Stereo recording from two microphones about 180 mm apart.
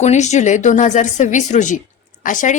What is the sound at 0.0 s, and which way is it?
Speech, 40° left (ahead or behind).